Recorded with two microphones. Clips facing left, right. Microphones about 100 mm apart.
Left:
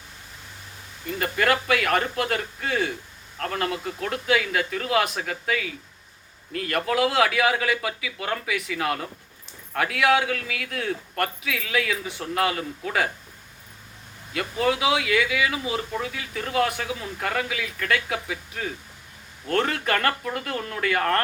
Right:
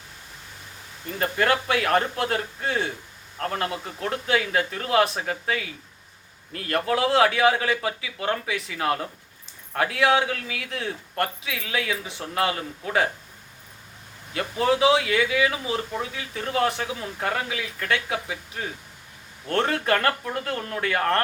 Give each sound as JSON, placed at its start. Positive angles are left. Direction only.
{"t": 1.2, "sound": "speech", "side_deg": -30}
{"t": 14.3, "sound": "speech", "side_deg": -30}
{"t": 19.5, "sound": "speech", "side_deg": -30}